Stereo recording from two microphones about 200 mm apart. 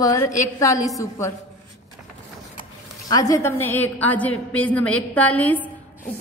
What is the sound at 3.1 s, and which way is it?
A woman's voice, 15° left (ahead or behind).